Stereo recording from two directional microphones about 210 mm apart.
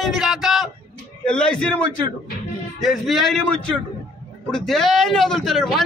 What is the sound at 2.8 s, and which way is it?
Speech, centre (ahead or behind).